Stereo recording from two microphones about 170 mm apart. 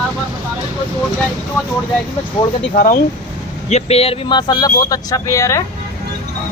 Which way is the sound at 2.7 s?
55° left (ahead or behind).